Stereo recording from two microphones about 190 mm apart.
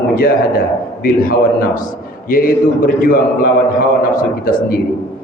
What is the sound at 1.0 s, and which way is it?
A man's voice, 50° left (ahead or behind).